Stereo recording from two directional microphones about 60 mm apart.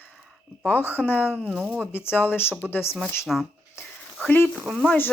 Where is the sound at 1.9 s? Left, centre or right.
Left.